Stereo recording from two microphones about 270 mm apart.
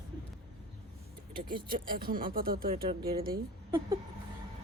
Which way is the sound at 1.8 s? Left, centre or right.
Right.